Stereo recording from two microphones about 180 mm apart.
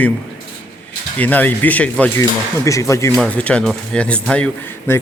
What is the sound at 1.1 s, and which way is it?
A man's voice, 10° left (ahead or behind).